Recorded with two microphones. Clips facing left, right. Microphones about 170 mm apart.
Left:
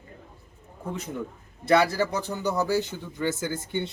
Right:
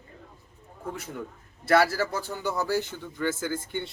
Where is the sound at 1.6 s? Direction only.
20° left (ahead or behind).